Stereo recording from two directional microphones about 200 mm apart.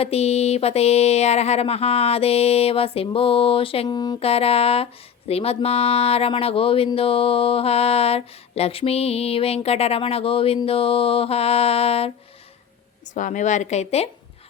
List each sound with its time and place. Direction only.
0.0 s speech: 30° left (ahead or behind)
13.1 s a woman's voice: 40° left (ahead or behind)